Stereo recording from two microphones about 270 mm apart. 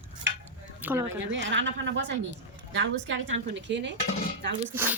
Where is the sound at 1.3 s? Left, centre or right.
Right.